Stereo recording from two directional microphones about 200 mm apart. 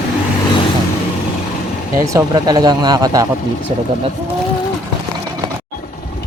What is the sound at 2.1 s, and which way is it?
Speech, 20° right (ahead or behind).